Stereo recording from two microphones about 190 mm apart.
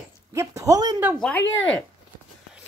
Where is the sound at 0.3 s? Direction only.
15° right (ahead or behind).